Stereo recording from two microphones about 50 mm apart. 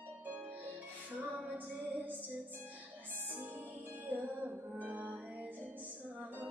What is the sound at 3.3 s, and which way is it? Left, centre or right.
Music, right.